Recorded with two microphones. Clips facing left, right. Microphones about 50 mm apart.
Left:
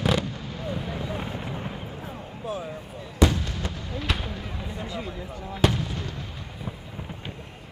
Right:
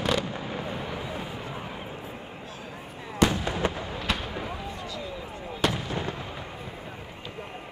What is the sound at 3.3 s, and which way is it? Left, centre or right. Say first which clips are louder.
Fireworks: right 4 dB; right.